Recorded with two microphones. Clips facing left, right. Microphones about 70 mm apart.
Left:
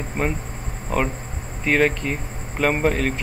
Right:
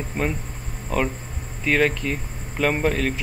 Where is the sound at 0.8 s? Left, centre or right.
Centre.